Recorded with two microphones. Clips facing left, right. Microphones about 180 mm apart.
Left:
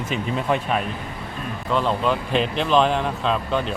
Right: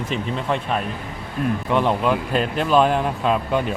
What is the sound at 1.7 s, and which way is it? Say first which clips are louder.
Speech: right 1 dB; 15° right (ahead or behind).